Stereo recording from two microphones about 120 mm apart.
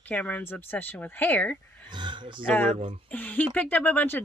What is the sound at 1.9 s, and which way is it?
Speech, 40° right (ahead or behind).